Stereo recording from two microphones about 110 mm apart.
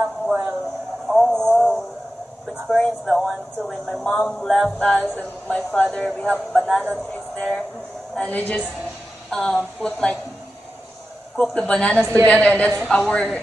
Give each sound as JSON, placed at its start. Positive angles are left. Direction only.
{"t": 0.0, "sound": "a sound", "side_deg": -15}
{"t": 1.0, "sound": "a sound", "side_deg": 0}
{"t": 2.7, "sound": "speech", "side_deg": 5}
{"t": 7.1, "sound": "music", "side_deg": 15}
{"t": 8.2, "sound": "speech", "side_deg": 15}
{"t": 11.3, "sound": "speech", "side_deg": 10}